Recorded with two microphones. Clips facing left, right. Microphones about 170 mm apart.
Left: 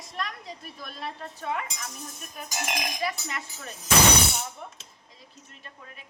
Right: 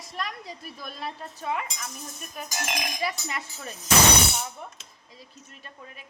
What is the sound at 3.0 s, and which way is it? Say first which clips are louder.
Speech: right 1 dB; 5° right (ahead or behind).